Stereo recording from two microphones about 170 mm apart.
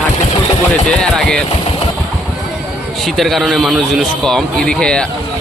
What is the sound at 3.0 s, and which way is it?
Speech, centre (ahead or behind).